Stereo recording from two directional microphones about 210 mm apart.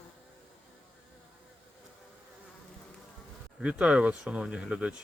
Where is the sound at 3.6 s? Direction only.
5° right (ahead or behind).